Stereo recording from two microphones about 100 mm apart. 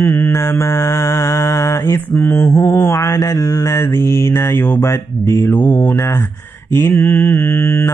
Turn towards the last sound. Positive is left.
turn(degrees=25)  # may be behind; listen again after turning